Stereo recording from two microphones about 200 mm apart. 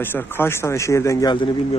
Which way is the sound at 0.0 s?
10° left (ahead or behind).